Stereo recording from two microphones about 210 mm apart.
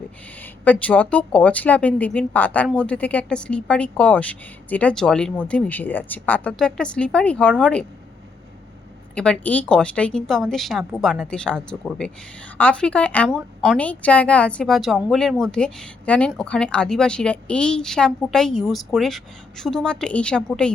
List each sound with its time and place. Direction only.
0.6 s a woman's voice: 5° left (ahead or behind)
9.1 s a woman's voice: 5° left (ahead or behind)